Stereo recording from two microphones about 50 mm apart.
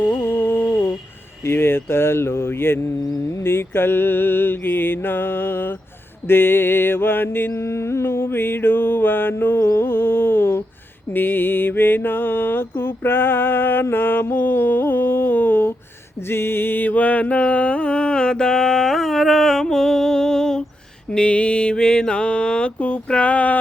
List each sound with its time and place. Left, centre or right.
0.2 s humming: left
1.5 s mantra: left
7.5 s mantra: left
13.9 s a sound: left
16.3 s music: left; by 20.7 s centre
21.1 s mantra: left